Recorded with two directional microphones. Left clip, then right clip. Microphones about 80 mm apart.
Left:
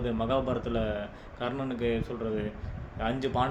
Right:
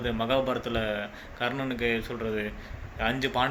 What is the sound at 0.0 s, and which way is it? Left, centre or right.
Speech, left.